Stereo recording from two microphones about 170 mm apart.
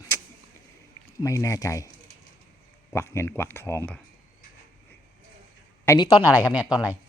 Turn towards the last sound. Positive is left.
turn(degrees=-5)  # may be behind; listen again after turning